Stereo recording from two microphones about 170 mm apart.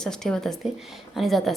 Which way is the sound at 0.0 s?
5° left (ahead or behind).